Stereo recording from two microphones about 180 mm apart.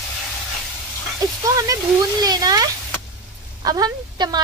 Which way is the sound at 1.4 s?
20° right (ahead or behind).